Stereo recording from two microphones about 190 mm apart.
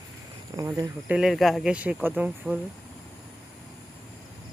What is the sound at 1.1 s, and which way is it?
Speech, centre (ahead or behind).